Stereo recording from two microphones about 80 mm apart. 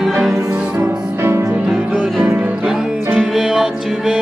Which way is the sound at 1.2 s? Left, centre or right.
Right.